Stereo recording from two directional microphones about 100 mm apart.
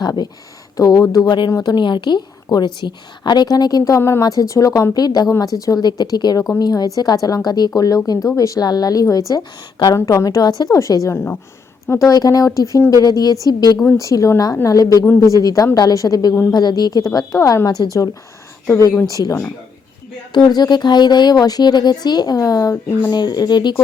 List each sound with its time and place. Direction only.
0.0 s speech: 45° left (ahead or behind)
0.8 s a woman's voice: 35° left (ahead or behind)
4.2 s a woman's voice: 40° left (ahead or behind)
12.0 s a woman's voice: 40° left (ahead or behind)
23.0 s speech: 45° left (ahead or behind)